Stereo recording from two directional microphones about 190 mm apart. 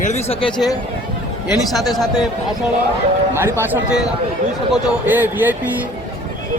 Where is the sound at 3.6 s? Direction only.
10° right (ahead or behind).